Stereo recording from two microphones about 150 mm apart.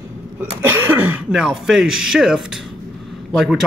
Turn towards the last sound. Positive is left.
turn(degrees=0)  # may be behind; listen again after turning